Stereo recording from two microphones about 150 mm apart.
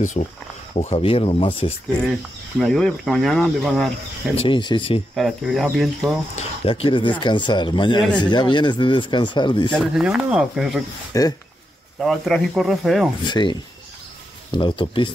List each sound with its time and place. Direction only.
0.0 s speech: 50° left (ahead or behind)
2.6 s speech: centre (ahead or behind)
4.4 s speech: 35° left (ahead or behind)
5.1 s speech: centre (ahead or behind)
6.3 s speech: 40° left (ahead or behind)
9.7 s speech: centre (ahead or behind)
11.1 s speech: 20° left (ahead or behind)
12.0 s speech: centre (ahead or behind)
13.2 s speech: 30° left (ahead or behind)